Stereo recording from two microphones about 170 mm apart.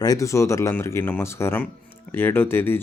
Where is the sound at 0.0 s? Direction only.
20° left (ahead or behind).